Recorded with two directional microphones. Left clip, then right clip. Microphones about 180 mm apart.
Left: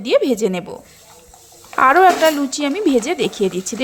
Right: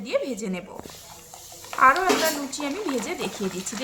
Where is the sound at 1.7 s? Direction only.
40° left (ahead or behind).